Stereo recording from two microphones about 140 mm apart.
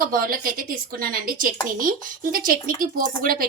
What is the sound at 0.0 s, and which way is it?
A woman's voice, 90° right.